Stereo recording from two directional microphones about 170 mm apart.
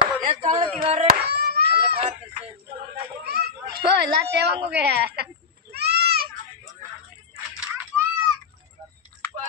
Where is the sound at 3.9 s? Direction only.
80° right.